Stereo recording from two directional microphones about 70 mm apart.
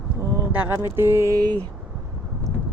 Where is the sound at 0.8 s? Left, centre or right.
Right.